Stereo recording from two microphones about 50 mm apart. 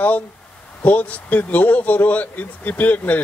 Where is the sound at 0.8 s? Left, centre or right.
Left.